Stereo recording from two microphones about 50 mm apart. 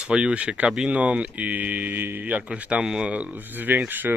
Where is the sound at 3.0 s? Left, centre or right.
Right.